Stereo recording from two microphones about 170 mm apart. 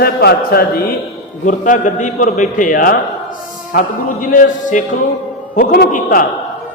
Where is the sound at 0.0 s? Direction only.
65° left (ahead or behind).